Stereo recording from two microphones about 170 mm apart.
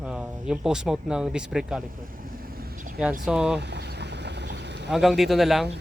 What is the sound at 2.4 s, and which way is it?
Vehicle, 55° right (ahead or behind).